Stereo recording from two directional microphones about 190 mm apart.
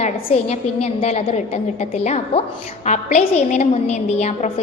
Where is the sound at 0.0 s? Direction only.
35° left (ahead or behind).